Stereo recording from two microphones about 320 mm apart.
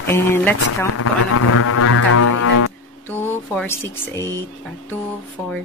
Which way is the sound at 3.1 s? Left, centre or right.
Centre.